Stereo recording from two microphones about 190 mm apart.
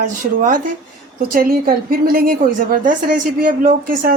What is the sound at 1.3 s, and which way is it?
Speech, 50° right (ahead or behind).